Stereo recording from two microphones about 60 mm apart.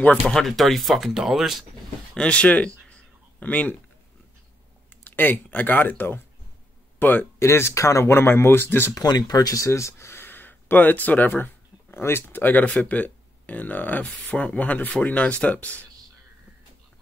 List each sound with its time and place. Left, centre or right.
0.3 s speech: centre
2.1 s a sound: centre
5.0 s speech: left
7.3 s speech: left
8.1 s speech: left
8.9 s speech: left
9.7 s a sound: left
12.0 s speech: left